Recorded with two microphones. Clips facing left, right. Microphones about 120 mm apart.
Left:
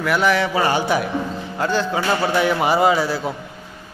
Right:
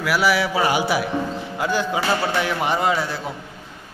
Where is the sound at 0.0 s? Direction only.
5° right (ahead or behind).